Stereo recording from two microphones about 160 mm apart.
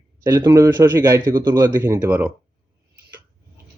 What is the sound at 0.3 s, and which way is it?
Speech, 20° right (ahead or behind).